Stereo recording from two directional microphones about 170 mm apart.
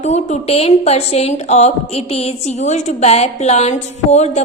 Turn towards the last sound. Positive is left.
turn(degrees=40)  # may be behind; listen again after turning